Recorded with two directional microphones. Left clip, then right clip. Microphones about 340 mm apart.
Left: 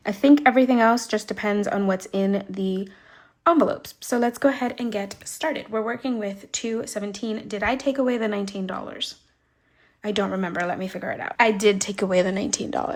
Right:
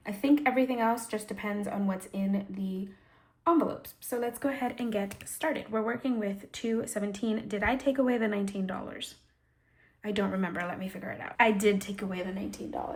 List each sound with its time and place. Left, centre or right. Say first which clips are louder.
0.0 s a woman's voice: left 10 dB; centre